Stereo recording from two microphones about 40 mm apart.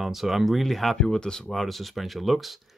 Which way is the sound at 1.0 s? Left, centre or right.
Centre.